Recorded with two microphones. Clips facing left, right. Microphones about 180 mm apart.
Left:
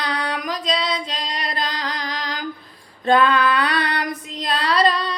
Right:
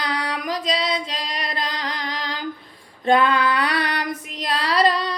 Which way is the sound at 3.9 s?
25° right (ahead or behind).